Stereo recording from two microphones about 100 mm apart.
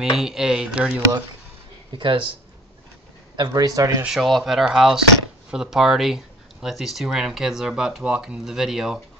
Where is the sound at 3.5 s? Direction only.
35° right (ahead or behind).